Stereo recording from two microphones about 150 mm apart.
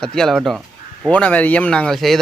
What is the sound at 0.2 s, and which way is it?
Speech, centre (ahead or behind).